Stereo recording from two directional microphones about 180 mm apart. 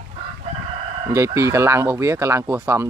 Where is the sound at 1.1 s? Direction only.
15° right (ahead or behind).